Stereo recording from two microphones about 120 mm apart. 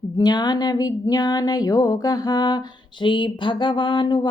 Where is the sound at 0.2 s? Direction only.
35° left (ahead or behind).